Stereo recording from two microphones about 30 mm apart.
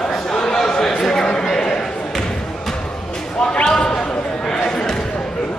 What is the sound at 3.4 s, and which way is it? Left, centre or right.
Basketball bounce, left.